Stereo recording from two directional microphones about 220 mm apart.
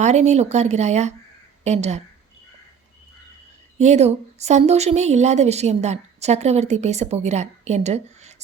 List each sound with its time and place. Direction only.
0.0 s a woman's voice: 30° right (ahead or behind)
3.8 s a woman's voice: 30° right (ahead or behind)